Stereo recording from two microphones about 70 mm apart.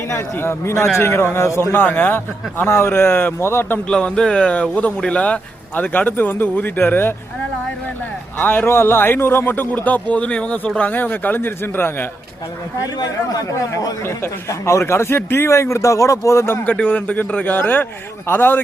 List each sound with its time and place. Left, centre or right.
0.1 s a man's voice: left
3.8 s a man's voice: centre; by 7.1 s left
8.4 s a man's voice: left
13.0 s speech: left
14.0 s a man's voice: left
16.6 s a man's voice: left